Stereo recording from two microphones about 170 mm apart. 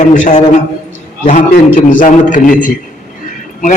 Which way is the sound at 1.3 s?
45° left (ahead or behind).